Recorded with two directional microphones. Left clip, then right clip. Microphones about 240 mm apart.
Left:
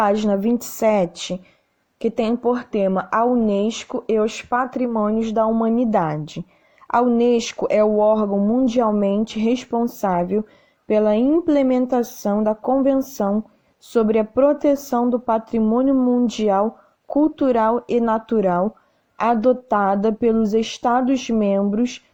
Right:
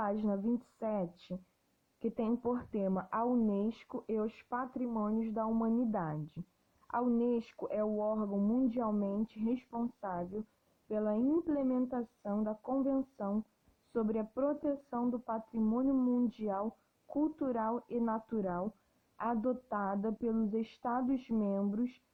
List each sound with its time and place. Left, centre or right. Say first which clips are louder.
0.0 s speech: left 17 dB; left